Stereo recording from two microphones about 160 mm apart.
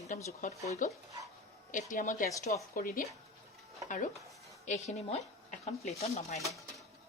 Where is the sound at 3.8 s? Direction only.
55° left (ahead or behind).